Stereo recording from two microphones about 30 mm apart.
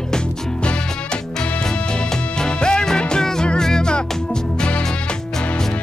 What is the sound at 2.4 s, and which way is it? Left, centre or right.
Music, left.